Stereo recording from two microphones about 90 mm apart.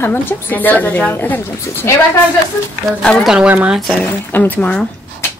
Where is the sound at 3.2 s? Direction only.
10° right (ahead or behind).